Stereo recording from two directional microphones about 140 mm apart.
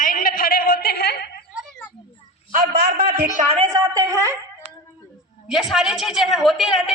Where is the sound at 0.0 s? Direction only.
80° left.